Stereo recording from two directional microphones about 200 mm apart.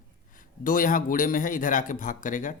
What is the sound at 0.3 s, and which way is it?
A man's voice, 45° left (ahead or behind).